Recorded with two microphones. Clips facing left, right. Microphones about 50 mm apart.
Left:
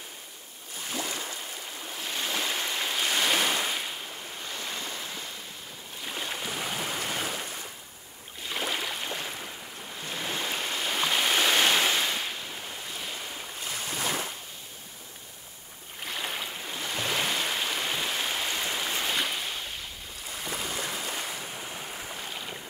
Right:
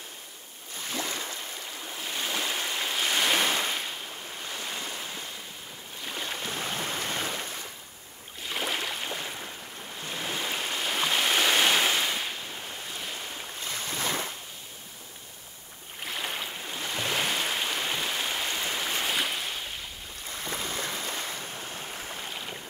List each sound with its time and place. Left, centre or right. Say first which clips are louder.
0.7 s boat: right 1 dB; left
1.1 s a sound: even; centre
1.9 s waves: even; centre
6.0 s boat: even; centre
7.1 s waves: even; centre
8.5 s boat: even; centre
9.9 s stream: even; centre
13.6 s boat: even; left
16.0 s stream: even; centre
20.8 s waves: even; centre
21.9 s boat: even; centre